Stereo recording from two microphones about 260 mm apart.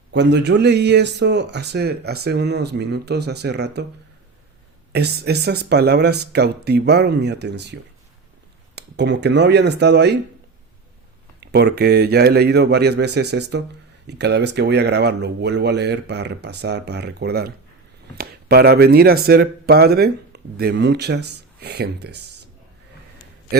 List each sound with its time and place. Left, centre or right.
0.1 s a man's voice: right
4.9 s a man's voice: right
11.3 s a man's voice: right